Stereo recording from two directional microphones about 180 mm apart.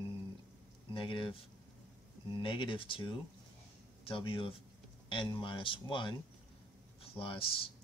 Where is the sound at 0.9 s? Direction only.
30° left (ahead or behind).